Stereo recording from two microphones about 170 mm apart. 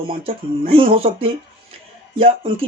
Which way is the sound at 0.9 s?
35° right (ahead or behind).